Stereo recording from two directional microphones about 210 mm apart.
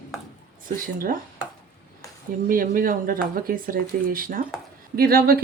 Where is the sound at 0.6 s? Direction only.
40° right (ahead or behind).